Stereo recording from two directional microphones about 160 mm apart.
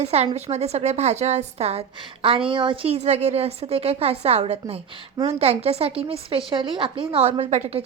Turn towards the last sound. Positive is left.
turn(degrees=-45)  # may be behind; listen again after turning